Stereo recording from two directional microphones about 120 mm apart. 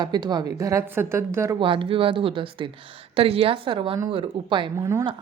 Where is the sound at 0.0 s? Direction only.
35° right (ahead or behind).